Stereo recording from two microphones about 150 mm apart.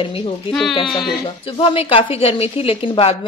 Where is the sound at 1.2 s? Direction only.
40° left (ahead or behind).